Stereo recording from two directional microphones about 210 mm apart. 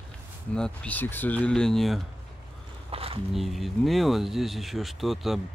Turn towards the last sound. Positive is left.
turn(degrees=0)  # may be behind; listen again after turning